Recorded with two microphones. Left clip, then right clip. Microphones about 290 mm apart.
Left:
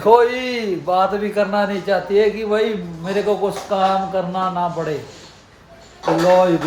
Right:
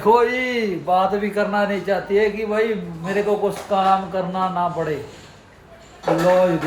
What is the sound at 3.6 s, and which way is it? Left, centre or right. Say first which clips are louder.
A man's voice: even; centre.